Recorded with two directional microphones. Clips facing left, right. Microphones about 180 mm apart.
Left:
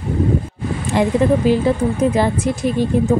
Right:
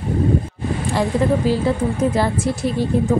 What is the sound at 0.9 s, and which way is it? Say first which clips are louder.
A woman's voice: left 4 dB; 20° left (ahead or behind).